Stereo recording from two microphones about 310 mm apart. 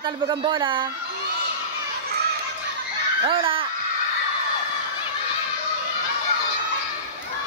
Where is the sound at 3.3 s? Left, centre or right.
Centre.